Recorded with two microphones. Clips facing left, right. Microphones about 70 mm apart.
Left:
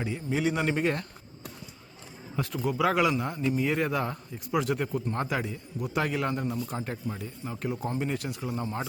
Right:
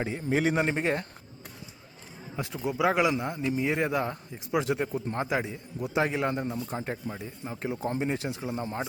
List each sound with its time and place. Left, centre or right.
0.0 s a man's voice: right
0.6 s a man's voice: right
2.3 s a man's voice: centre